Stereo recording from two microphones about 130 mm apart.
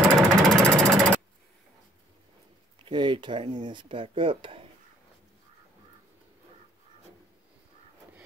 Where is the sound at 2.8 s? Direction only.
35° right (ahead or behind).